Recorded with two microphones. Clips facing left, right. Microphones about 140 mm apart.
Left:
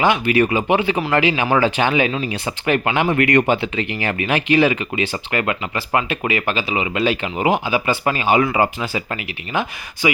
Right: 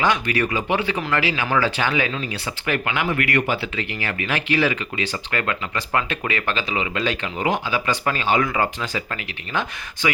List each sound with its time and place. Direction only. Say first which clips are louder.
0.0 s speech: left 5 dB; 15° left (ahead or behind)